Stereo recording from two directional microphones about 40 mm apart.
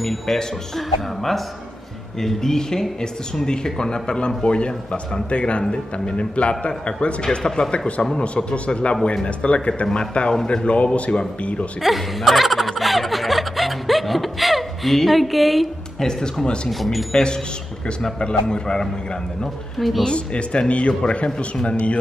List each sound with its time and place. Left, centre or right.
0.0 s a man's voice: centre; by 7.2 s left
7.2 s a man's voice: centre
11.8 s snicker: centre
16.0 s speech: centre
16.6 s speech: centre
17.1 s a man's voice: centre
20.0 s a man's voice: left